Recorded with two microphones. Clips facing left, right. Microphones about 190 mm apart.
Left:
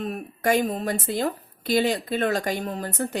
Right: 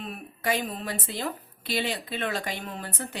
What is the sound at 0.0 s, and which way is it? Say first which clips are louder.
Speech: left 6 dB; 45° left (ahead or behind).